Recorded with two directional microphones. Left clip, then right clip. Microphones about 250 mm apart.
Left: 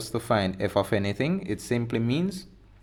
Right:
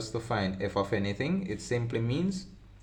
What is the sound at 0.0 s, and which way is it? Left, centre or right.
Speech, left.